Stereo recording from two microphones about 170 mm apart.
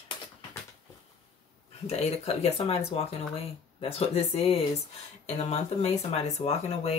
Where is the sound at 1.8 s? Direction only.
35° left (ahead or behind).